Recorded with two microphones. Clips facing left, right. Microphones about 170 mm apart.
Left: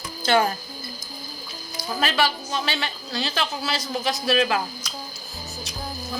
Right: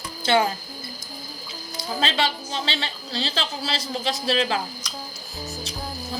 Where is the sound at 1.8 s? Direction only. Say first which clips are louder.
Left 1 dB; 25° right (ahead or behind).